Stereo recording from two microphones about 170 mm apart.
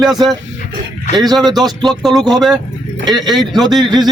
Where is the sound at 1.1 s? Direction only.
25° right (ahead or behind).